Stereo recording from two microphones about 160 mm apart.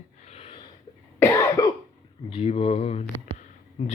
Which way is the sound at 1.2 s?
20° left (ahead or behind).